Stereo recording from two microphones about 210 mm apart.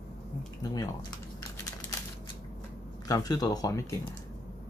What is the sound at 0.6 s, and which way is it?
Speech, 20° left (ahead or behind).